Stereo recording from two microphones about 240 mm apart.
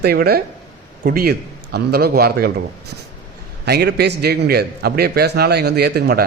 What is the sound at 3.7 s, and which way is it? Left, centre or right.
A man's voice, right.